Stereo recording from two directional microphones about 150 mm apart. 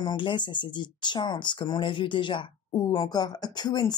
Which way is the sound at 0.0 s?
30° left (ahead or behind).